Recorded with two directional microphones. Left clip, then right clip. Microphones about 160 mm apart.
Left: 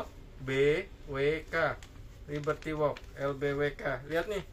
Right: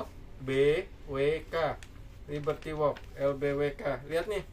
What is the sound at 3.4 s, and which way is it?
Speech, 40° right (ahead or behind).